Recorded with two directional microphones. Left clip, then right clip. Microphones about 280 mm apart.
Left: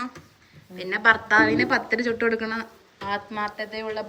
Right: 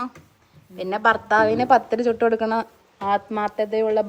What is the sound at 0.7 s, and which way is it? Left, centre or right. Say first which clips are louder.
Speech: even; centre.